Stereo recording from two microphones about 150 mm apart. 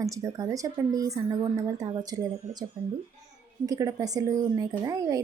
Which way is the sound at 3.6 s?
25° right (ahead or behind).